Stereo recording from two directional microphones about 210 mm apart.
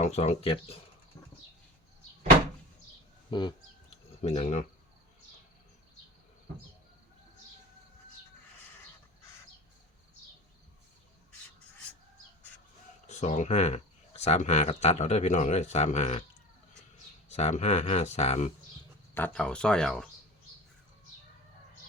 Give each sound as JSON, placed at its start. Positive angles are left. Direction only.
{"t": 0.0, "sound": "speech", "side_deg": 30}
{"t": 3.2, "sound": "cricket", "side_deg": 20}
{"t": 13.1, "sound": "speech", "side_deg": 35}
{"t": 17.2, "sound": "speech", "side_deg": 30}
{"t": 19.1, "sound": "speech", "side_deg": 5}